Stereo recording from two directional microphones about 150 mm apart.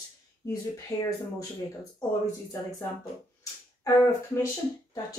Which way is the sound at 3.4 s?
20° left (ahead or behind).